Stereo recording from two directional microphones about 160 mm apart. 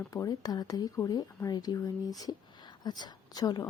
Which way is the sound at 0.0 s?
20° left (ahead or behind).